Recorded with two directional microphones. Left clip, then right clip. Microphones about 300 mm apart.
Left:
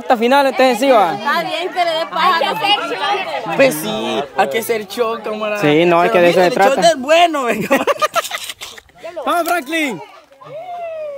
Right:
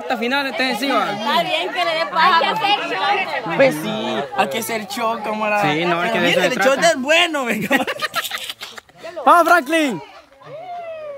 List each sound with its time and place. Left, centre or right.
0.1 s speech: centre; by 4.3 s left
4.4 s speech: centre
5.6 s speech: centre
9.2 s speech: centre